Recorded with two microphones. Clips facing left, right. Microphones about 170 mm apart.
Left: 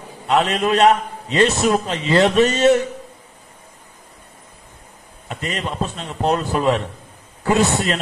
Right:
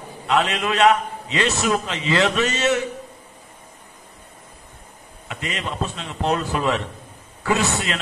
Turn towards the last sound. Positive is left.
turn(degrees=40)  # may be behind; listen again after turning